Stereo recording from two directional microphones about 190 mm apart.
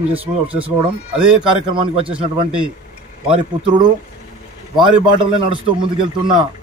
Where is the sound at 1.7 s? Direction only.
25° right (ahead or behind).